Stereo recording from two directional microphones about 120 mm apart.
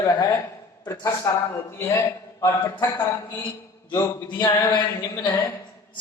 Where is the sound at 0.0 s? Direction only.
35° left (ahead or behind).